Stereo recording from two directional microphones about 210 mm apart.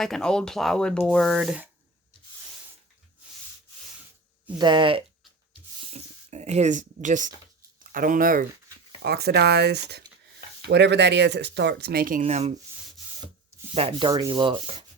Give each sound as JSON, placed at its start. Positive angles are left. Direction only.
{"t": 0.0, "sound": "speech", "side_deg": 0}
{"t": 4.5, "sound": "sanding", "side_deg": -20}
{"t": 5.9, "sound": "speech", "side_deg": -30}
{"t": 13.7, "sound": "sanding", "side_deg": -25}